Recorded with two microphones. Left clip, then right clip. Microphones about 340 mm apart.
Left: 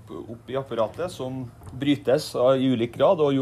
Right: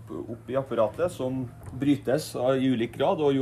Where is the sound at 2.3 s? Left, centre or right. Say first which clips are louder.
Left 4 dB; centre.